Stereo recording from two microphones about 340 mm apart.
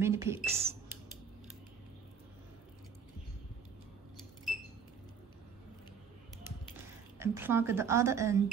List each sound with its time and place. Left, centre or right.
0.0 s a woman's voice: centre
7.2 s a woman's voice: centre